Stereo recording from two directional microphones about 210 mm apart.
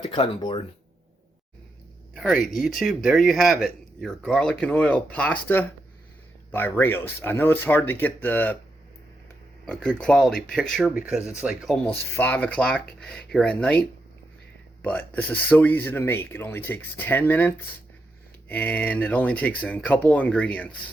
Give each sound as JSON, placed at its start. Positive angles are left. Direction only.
{"t": 0.1, "sound": "speech", "side_deg": 25}
{"t": 2.1, "sound": "speech", "side_deg": 0}
{"t": 9.6, "sound": "speech", "side_deg": 5}
{"t": 11.9, "sound": "speech", "side_deg": 10}